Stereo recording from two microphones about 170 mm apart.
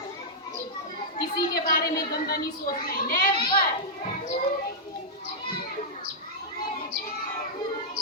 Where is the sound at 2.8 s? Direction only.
60° left (ahead or behind).